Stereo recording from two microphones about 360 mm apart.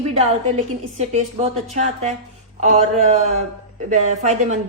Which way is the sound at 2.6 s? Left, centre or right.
Centre.